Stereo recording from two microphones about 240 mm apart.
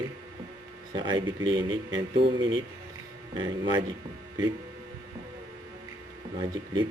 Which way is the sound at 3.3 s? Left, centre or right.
Centre.